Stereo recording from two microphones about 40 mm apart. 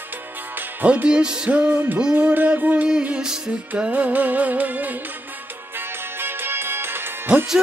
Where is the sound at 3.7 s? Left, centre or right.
Right.